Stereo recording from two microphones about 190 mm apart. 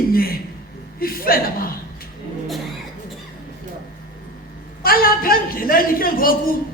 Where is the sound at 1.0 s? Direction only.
50° left (ahead or behind).